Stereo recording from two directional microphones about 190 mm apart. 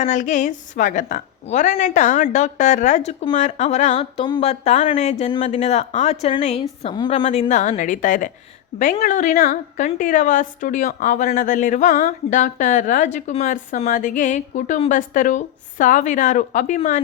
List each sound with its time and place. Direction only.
0.0 s a woman's voice: 40° left (ahead or behind)